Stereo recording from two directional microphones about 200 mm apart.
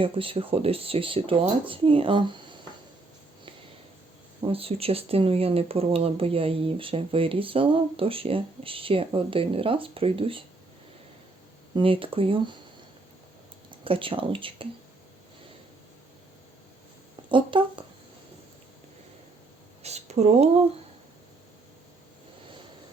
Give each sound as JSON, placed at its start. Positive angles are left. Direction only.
{"t": 0.0, "sound": "speech", "side_deg": -25}
{"t": 4.4, "sound": "speech", "side_deg": -30}
{"t": 11.7, "sound": "speech", "side_deg": -25}
{"t": 13.7, "sound": "speech", "side_deg": -25}
{"t": 17.2, "sound": "speech", "side_deg": -25}
{"t": 19.8, "sound": "speech", "side_deg": -35}